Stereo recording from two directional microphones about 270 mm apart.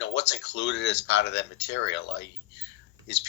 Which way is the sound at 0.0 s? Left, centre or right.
Left.